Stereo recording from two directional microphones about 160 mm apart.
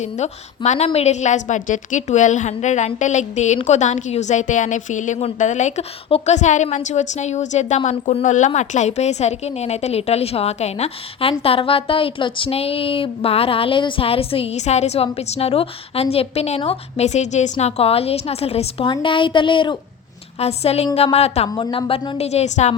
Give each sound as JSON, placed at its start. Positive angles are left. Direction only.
{"t": 0.0, "sound": "a woman's voice", "side_deg": 45}
{"t": 21.5, "sound": "a woman's voice", "side_deg": 30}